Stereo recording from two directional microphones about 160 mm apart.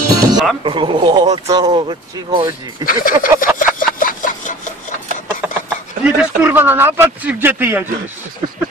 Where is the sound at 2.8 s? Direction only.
60° left (ahead or behind).